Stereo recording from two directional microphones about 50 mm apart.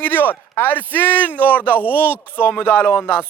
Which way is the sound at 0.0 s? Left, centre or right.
Left.